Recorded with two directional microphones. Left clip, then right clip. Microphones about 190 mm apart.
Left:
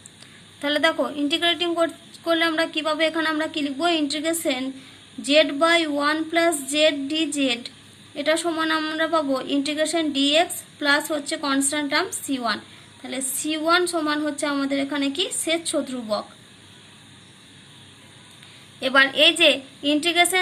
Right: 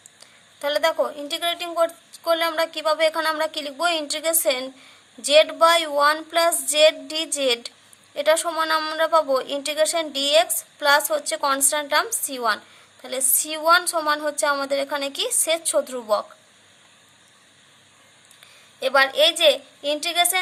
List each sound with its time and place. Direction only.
0.6 s a woman's voice: 35° right (ahead or behind); by 16.2 s 50° right (ahead or behind)
18.8 s speech: 35° right (ahead or behind)